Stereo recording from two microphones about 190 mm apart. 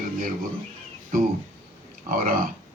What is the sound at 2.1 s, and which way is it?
Speech, 50° right (ahead or behind).